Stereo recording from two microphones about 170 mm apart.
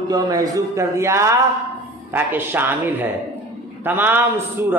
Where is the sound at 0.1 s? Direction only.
20° right (ahead or behind).